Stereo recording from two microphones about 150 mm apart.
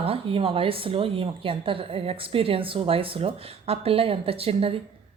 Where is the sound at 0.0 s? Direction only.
40° right (ahead or behind).